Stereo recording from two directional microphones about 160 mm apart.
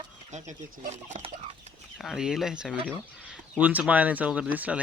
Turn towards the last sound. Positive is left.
turn(degrees=-10)  # may be behind; listen again after turning